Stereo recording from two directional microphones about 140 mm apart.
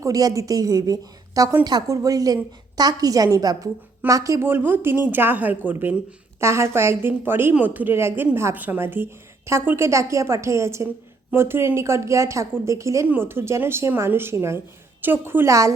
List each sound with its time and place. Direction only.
0.0 s a woman's voice: 25° right (ahead or behind)